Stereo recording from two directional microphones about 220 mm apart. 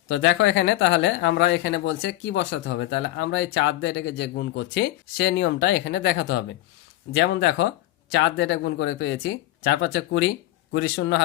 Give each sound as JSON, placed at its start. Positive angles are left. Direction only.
{"t": 0.2, "sound": "speech", "side_deg": 60}